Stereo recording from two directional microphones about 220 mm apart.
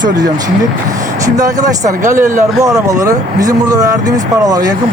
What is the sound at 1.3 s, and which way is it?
Speech, 15° right (ahead or behind).